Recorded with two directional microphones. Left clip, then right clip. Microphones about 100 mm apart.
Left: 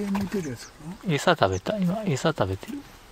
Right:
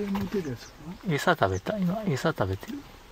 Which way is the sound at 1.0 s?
15° left (ahead or behind).